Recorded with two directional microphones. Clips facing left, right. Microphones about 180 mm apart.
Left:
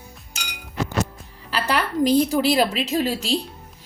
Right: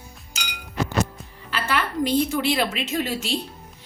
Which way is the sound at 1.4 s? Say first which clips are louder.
Left 2 dB; 40° left (ahead or behind).